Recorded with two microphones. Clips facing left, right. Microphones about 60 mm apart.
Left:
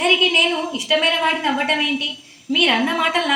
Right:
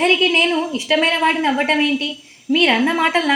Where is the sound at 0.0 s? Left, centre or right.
Right.